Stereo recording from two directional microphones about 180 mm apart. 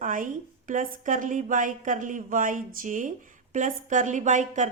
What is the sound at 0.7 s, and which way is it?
A woman's voice, 45° right (ahead or behind).